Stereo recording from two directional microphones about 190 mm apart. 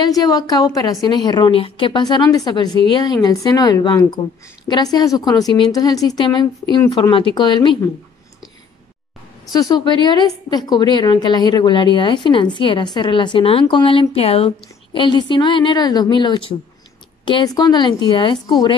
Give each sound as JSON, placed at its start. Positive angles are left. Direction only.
{"t": 0.0, "sound": "a woman's voice", "side_deg": 20}
{"t": 9.5, "sound": "a woman's voice", "side_deg": 20}